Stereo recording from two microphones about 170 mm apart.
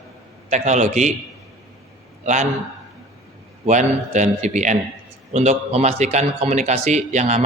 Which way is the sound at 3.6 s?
45° right (ahead or behind).